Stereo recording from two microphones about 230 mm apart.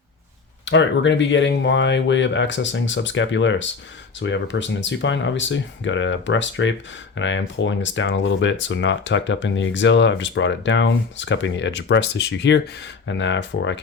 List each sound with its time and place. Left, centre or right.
0.6 s speech: left